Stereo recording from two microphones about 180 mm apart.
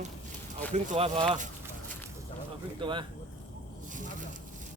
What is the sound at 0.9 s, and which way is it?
Speech, 35° right (ahead or behind).